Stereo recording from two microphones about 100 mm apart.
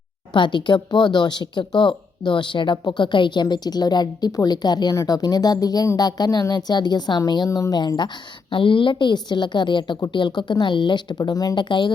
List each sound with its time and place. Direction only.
0.3 s a woman's voice: 50° left (ahead or behind)